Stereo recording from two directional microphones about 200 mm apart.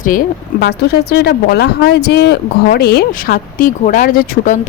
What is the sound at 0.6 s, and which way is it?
Speech, 55° left (ahead or behind).